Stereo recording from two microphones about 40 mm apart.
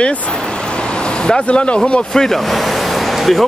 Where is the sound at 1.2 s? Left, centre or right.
Left.